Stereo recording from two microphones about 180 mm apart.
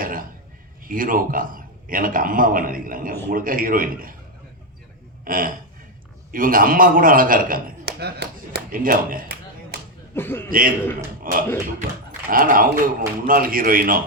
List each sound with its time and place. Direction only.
0.0 s a sound: 50° right (ahead or behind)
0.9 s a man's voice: 50° right (ahead or behind)
5.2 s a man's voice: 50° right (ahead or behind)
10.2 s a man's voice: 10° left (ahead or behind)
11.2 s a man's voice: 50° right (ahead or behind)